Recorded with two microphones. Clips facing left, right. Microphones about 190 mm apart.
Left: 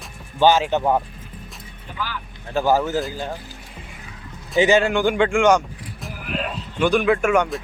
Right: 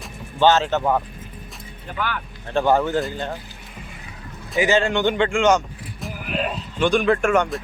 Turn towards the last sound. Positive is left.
turn(degrees=5)  # may be behind; listen again after turning